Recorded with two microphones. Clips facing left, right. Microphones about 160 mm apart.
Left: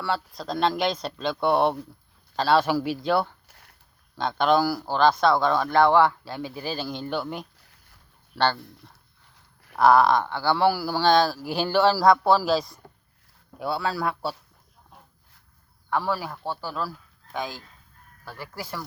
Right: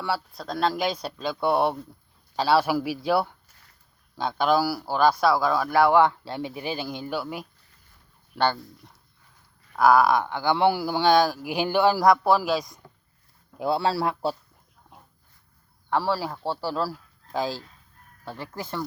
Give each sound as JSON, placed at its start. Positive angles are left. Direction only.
{"t": 0.3, "sound": "a man's voice", "side_deg": 0}
{"t": 3.4, "sound": "a sound", "side_deg": 65}
{"t": 4.2, "sound": "a man's voice", "side_deg": -5}
{"t": 9.7, "sound": "a man's voice", "side_deg": -5}
{"t": 12.3, "sound": "speech", "side_deg": 35}
{"t": 13.6, "sound": "a man's voice", "side_deg": -30}
{"t": 15.9, "sound": "a man's voice", "side_deg": -30}